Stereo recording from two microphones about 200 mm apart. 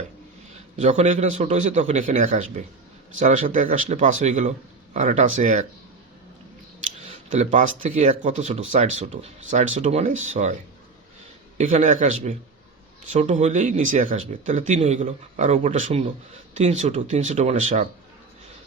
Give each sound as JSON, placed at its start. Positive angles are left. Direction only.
{"t": 0.8, "sound": "speech", "side_deg": -35}
{"t": 7.0, "sound": "speech", "side_deg": -35}
{"t": 13.1, "sound": "speech", "side_deg": -35}